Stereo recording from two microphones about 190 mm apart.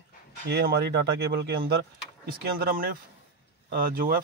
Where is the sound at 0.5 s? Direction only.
60° right (ahead or behind).